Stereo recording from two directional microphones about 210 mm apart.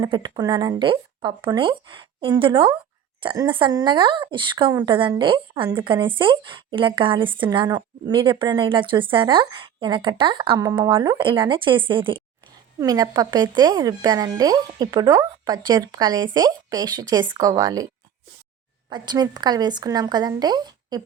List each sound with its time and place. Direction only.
0.0 s a woman's voice: 20° right (ahead or behind)
18.9 s a woman's voice: 20° right (ahead or behind)